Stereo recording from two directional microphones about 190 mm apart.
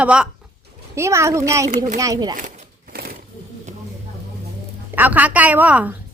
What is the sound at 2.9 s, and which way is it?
Sewing machine, 50° right (ahead or behind).